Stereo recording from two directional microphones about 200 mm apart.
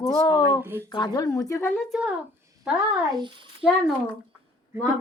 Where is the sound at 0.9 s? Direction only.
20° left (ahead or behind).